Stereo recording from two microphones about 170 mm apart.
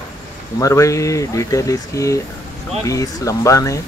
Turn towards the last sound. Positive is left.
turn(degrees=20)  # may be behind; listen again after turning